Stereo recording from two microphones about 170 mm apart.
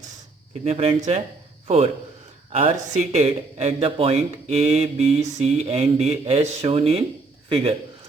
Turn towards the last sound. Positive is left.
turn(degrees=-30)  # may be behind; listen again after turning